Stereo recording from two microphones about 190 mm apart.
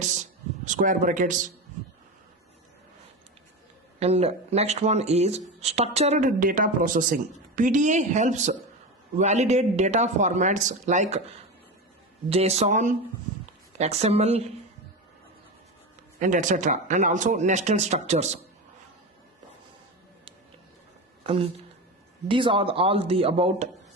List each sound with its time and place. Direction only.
0.0 s a sound: 40° right (ahead or behind)
4.0 s speech: 35° right (ahead or behind)
16.2 s speech: 40° right (ahead or behind)
21.2 s speech: 30° right (ahead or behind)